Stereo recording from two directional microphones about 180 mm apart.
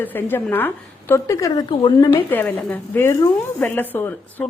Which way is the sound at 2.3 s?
10° left (ahead or behind).